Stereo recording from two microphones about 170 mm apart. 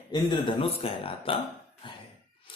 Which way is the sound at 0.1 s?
30° left (ahead or behind).